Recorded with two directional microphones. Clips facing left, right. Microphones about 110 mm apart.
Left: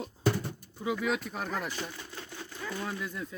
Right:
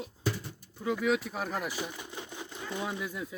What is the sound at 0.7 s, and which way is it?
Speech, 5° left (ahead or behind).